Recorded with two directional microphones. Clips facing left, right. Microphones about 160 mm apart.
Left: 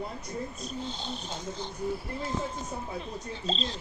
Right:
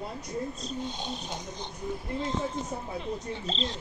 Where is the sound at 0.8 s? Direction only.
15° right (ahead or behind).